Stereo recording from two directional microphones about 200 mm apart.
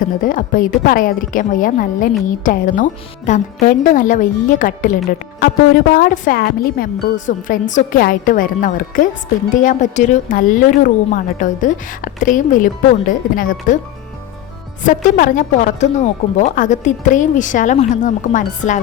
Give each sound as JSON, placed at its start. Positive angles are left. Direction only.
{"t": 0.0, "sound": "a woman's voice", "side_deg": 45}
{"t": 14.8, "sound": "a woman's voice", "side_deg": 40}